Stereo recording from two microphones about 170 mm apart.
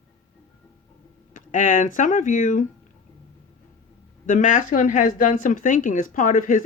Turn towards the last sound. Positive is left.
turn(degrees=50)  # may be behind; listen again after turning